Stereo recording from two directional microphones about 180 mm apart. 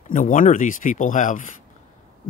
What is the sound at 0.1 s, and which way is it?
Speech, 45° left (ahead or behind).